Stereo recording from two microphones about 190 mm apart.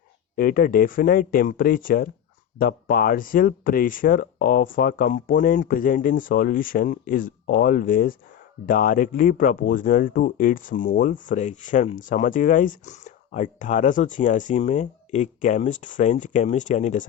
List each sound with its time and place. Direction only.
0.3 s speech: 50° left (ahead or behind)